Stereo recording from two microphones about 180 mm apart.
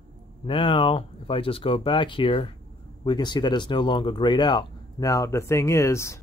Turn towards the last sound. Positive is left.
turn(degrees=15)  # may be behind; listen again after turning